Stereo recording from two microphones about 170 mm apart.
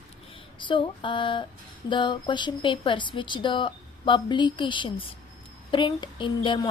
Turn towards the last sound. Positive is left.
turn(degrees=30)  # may be behind; listen again after turning